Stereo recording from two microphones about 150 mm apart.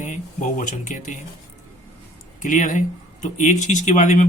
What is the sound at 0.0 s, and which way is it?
Speech, 55° left (ahead or behind).